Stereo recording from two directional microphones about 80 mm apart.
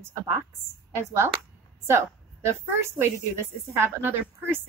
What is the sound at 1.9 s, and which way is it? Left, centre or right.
A woman's voice, right.